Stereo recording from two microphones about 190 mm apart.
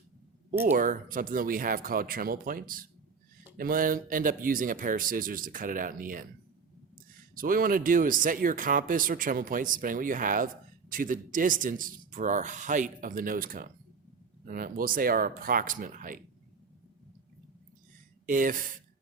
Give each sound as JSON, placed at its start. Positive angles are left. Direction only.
{"t": 0.7, "sound": "speech", "side_deg": -45}
{"t": 7.3, "sound": "speech", "side_deg": -45}
{"t": 18.3, "sound": "speech", "side_deg": -45}